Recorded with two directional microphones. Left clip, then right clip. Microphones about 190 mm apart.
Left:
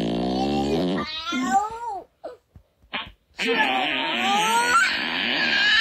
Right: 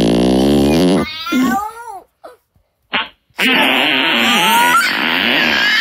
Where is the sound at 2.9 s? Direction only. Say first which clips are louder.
Right 13 dB; 60° right (ahead or behind).